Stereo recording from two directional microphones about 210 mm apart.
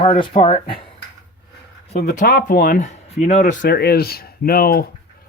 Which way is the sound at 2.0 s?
40° left (ahead or behind).